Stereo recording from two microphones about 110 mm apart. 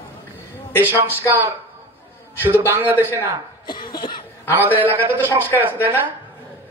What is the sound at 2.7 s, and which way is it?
Speech, 20° right (ahead or behind).